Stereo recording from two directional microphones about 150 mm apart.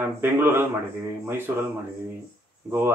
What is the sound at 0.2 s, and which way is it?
A man's voice, 15° right (ahead or behind).